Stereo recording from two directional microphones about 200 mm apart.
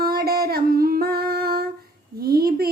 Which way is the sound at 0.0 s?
50° right (ahead or behind).